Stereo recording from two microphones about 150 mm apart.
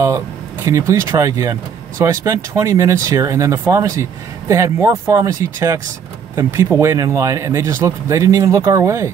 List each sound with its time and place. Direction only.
0.7 s speech: 20° right (ahead or behind)